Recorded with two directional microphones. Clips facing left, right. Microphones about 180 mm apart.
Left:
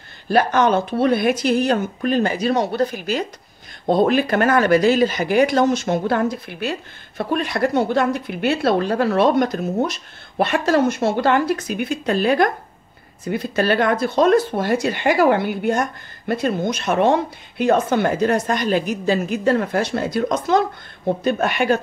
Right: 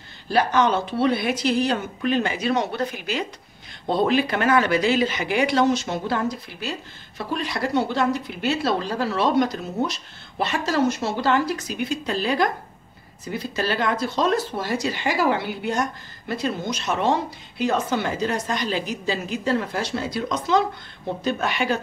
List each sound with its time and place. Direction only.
0.3 s speech: 50° left (ahead or behind)